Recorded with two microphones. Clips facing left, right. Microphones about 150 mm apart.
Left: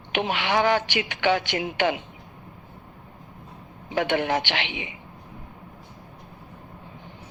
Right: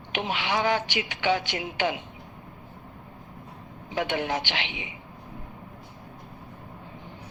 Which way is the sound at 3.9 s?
70° left (ahead or behind).